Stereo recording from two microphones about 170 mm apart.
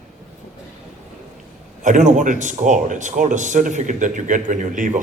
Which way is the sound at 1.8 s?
45° right (ahead or behind).